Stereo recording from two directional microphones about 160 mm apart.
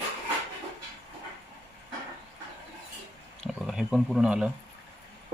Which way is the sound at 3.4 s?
5° right (ahead or behind).